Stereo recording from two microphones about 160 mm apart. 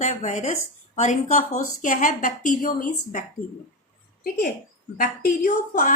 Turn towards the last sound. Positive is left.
turn(degrees=55)  # may be behind; listen again after turning